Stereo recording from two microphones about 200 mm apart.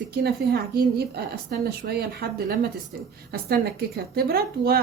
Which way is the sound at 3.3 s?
50° right (ahead or behind).